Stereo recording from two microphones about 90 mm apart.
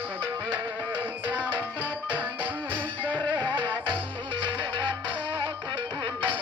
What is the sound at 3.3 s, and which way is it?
Music, 60° right (ahead or behind).